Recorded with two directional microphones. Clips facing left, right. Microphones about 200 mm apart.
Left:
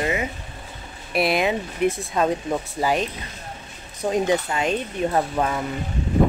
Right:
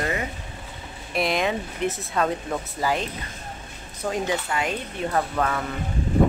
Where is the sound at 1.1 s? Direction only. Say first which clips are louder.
Left 3 dB; 10° left (ahead or behind).